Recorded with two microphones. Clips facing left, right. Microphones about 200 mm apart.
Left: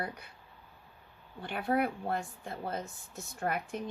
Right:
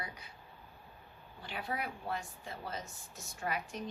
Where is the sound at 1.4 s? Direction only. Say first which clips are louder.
Left 9 dB; 55° left (ahead or behind).